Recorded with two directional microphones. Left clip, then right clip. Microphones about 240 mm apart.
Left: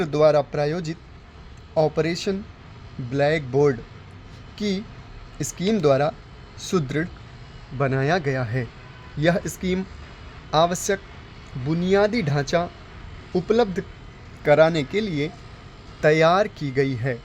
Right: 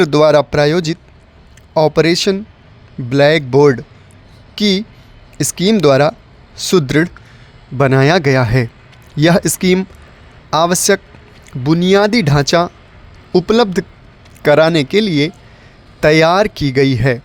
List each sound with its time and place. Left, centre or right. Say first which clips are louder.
0.0 s speech: right 8 dB; right